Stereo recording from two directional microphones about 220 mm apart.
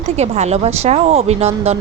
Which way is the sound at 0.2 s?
30° right (ahead or behind).